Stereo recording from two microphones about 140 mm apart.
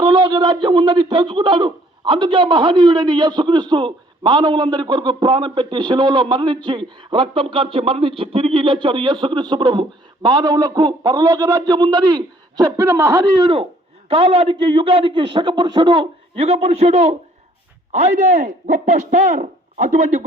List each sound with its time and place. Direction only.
0.0 s a man's voice: 30° right (ahead or behind)
13.4 s speech: 40° right (ahead or behind)
16.4 s a man's voice: 50° right (ahead or behind)